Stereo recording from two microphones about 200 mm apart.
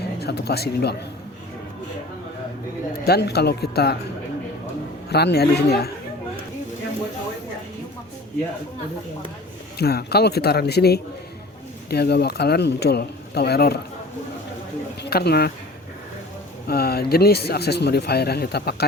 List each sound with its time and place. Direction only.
0.2 s speech: 55° left (ahead or behind)
3.1 s a man's voice: 55° left (ahead or behind)
5.0 s a man's voice: 55° left (ahead or behind)
9.7 s a man's voice: 50° left (ahead or behind)
15.0 s speech: 55° left (ahead or behind)
16.6 s a man's voice: 50° left (ahead or behind)